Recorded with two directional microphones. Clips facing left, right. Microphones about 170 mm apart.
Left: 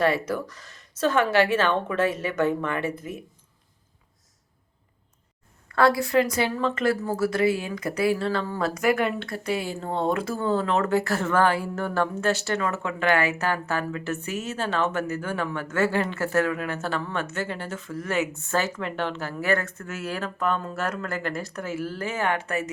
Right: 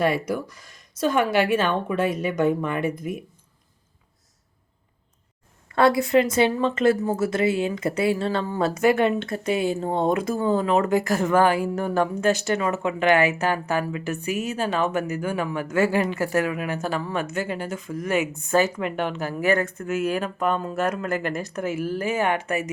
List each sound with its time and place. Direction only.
0.0 s speech: 10° right (ahead or behind)
5.6 s speech: 20° right (ahead or behind)